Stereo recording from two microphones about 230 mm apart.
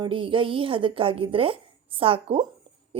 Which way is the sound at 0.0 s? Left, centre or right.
Right.